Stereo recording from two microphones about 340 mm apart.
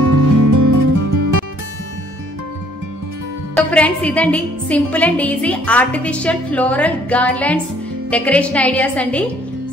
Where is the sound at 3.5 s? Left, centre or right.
Centre.